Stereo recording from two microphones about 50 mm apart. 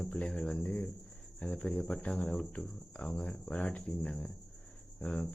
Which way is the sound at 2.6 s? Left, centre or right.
Centre.